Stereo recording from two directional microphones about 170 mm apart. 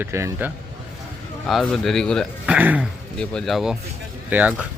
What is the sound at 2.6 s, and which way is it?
Speech, 10° right (ahead or behind).